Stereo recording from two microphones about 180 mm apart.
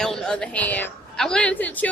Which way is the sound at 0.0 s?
5° left (ahead or behind).